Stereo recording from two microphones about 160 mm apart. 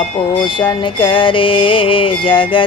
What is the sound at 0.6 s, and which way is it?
Music, 30° left (ahead or behind).